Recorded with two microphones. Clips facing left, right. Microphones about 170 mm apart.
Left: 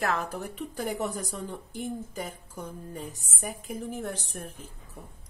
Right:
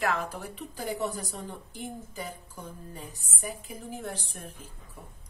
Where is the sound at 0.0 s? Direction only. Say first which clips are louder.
Left 1 dB; 45° left (ahead or behind).